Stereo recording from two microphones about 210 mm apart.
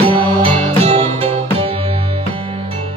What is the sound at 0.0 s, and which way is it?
Music, 25° right (ahead or behind).